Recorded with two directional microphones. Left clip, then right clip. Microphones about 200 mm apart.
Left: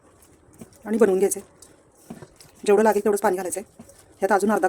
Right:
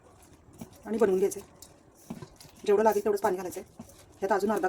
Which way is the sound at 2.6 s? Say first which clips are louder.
Left 6 dB; 45° left (ahead or behind).